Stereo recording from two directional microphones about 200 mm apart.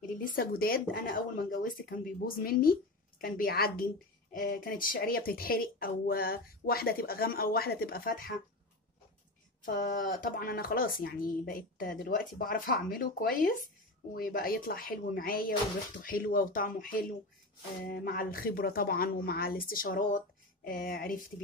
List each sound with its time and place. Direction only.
0.2 s speech: 50° left (ahead or behind)
9.7 s speech: 45° left (ahead or behind)